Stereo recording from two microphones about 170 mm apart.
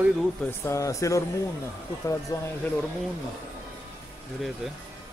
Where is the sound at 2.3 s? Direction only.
20° left (ahead or behind).